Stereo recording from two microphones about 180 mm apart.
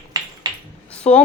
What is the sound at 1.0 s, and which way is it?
Speech, 35° left (ahead or behind).